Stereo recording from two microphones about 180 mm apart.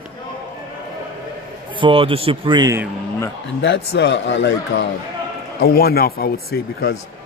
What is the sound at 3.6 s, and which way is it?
A man's voice, 75° left (ahead or behind).